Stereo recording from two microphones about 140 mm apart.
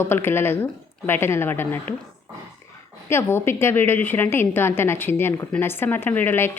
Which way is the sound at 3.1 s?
15° left (ahead or behind).